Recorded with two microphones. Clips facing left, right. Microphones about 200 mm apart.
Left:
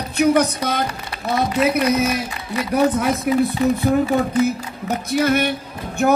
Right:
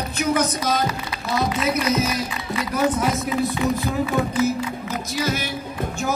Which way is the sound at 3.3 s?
65° left (ahead or behind).